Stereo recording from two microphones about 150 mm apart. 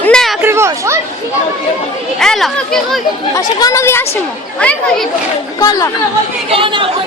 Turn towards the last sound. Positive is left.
turn(degrees=-35)  # may be behind; listen again after turning